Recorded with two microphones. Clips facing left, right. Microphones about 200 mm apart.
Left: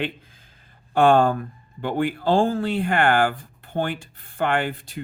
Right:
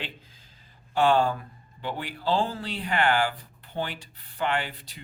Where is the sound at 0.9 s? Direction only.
50° left (ahead or behind).